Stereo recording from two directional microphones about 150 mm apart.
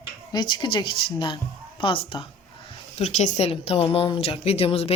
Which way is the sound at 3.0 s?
50° left (ahead or behind).